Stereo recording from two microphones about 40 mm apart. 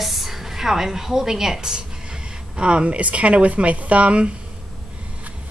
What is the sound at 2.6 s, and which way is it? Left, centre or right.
Speech, right.